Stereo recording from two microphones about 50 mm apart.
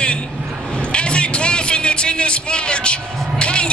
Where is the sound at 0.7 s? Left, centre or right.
Left.